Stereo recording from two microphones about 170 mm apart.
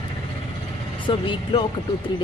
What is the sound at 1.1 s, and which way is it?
Speech, 30° left (ahead or behind).